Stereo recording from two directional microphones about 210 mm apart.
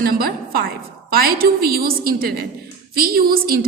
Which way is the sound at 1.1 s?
45° right (ahead or behind).